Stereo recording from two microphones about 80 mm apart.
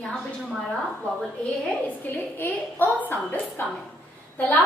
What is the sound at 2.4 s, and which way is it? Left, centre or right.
A woman's voice, left.